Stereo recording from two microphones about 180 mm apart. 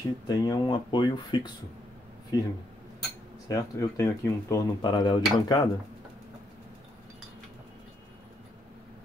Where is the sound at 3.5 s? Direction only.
15° left (ahead or behind).